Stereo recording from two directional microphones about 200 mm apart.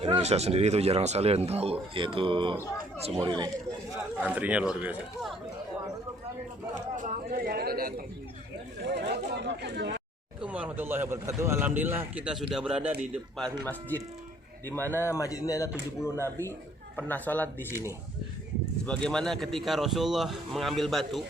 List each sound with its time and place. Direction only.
0.0 s a man's voice: 30° right (ahead or behind)
4.2 s speech: 5° right (ahead or behind)
6.9 s a sound: 40° right (ahead or behind)
8.8 s chatter: 55° right (ahead or behind)
10.4 s speech: 5° right (ahead or behind)